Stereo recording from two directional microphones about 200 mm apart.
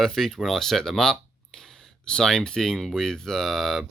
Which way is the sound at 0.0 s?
Centre (ahead or behind).